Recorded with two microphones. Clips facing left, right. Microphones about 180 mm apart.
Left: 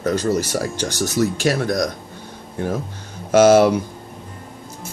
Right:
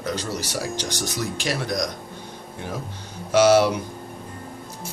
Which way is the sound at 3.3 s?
50° left (ahead or behind).